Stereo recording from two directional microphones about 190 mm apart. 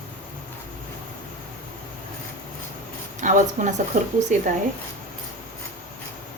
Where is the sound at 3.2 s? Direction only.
40° right (ahead or behind).